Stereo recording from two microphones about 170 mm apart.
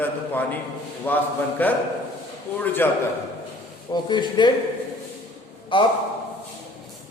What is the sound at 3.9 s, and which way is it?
Speech, 25° left (ahead or behind).